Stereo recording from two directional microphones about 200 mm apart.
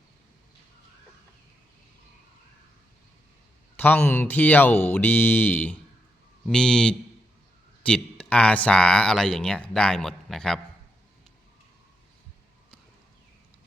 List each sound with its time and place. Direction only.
3.8 s speech: 10° left (ahead or behind)